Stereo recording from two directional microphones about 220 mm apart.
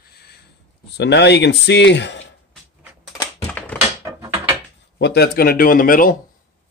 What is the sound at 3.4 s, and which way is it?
Typewriter, 5° left (ahead or behind).